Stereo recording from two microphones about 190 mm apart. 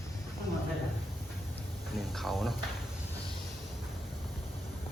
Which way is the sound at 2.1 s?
Centre (ahead or behind).